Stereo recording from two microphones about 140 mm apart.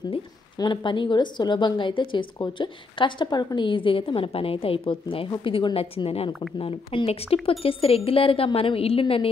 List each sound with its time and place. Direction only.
0.6 s speech: 35° left (ahead or behind)